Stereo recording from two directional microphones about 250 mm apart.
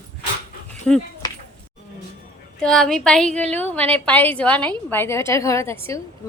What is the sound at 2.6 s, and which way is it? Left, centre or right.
A woman's voice, centre.